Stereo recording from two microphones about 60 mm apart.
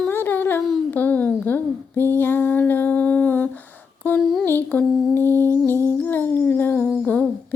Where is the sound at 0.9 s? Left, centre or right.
Left.